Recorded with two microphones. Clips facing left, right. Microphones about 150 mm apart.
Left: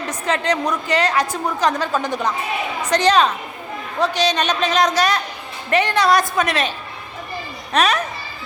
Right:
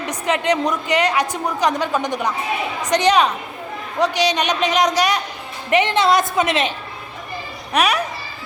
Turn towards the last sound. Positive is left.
turn(degrees=-10)  # may be behind; listen again after turning